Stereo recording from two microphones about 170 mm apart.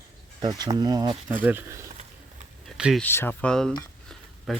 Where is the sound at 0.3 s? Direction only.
25° right (ahead or behind).